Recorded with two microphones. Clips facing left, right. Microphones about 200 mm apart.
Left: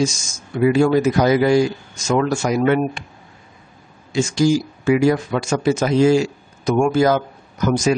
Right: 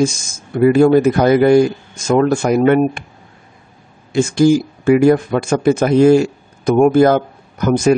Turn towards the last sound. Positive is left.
turn(degrees=-55)  # may be behind; listen again after turning